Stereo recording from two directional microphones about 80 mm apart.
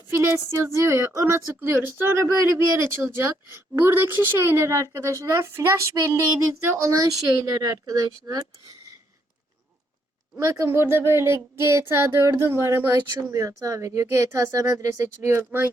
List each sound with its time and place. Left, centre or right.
0.1 s a woman's voice: right
2.2 s a woman's voice: right
10.3 s a woman's voice: right